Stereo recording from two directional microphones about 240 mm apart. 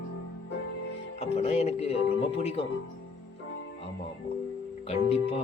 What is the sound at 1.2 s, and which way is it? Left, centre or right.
Music, left.